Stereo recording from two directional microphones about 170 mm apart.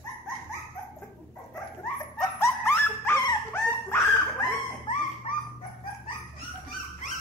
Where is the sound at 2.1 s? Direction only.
15° left (ahead or behind).